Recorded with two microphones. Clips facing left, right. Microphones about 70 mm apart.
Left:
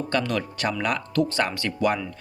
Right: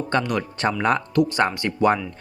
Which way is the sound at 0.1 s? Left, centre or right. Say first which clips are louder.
Right 3 dB; right.